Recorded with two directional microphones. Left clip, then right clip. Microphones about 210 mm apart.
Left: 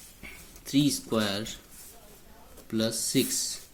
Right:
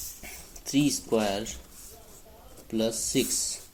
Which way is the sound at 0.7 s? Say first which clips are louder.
Right 1 dB; 30° left (ahead or behind).